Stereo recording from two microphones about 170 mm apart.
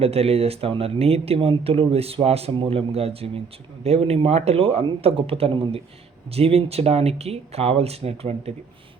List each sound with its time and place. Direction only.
0.0 s speech: 35° right (ahead or behind)